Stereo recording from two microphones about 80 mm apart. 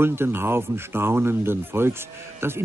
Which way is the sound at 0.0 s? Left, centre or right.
Right.